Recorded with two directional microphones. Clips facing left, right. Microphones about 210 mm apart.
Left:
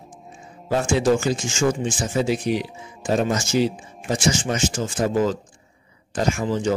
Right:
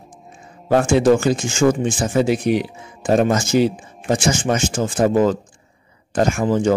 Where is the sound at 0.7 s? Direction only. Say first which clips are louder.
Right 5 dB; 55° right (ahead or behind).